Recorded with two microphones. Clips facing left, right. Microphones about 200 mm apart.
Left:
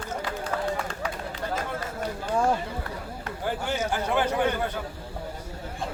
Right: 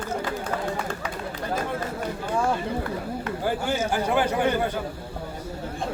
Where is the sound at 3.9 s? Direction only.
10° right (ahead or behind).